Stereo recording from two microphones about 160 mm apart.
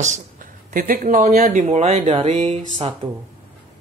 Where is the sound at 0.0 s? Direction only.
50° right (ahead or behind).